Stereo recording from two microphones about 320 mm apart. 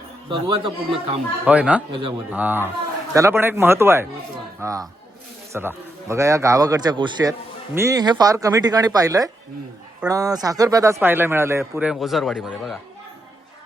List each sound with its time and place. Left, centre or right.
0.3 s speech: centre
1.5 s speech: centre
1.9 s speech: centre
2.3 s speech: centre